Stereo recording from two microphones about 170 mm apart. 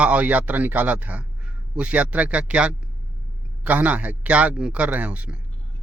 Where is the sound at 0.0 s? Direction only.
10° right (ahead or behind).